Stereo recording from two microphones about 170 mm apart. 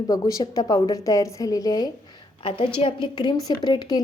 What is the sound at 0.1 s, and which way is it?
A woman's voice, 20° left (ahead or behind).